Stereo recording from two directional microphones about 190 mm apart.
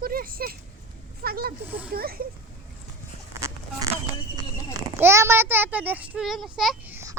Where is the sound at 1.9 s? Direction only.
50° right (ahead or behind).